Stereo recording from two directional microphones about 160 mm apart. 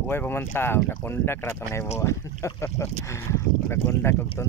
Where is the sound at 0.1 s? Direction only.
10° left (ahead or behind).